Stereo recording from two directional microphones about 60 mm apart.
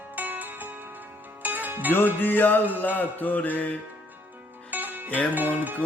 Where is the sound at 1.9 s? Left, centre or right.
Left.